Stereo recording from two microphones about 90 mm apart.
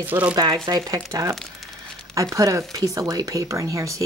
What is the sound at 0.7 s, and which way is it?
Speech, 45° right (ahead or behind).